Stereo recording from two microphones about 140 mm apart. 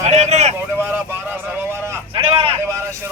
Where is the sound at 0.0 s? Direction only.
55° right (ahead or behind).